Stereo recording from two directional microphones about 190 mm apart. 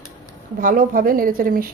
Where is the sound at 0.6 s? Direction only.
45° right (ahead or behind).